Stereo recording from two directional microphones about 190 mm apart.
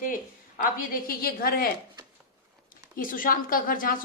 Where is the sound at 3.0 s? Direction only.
45° left (ahead or behind).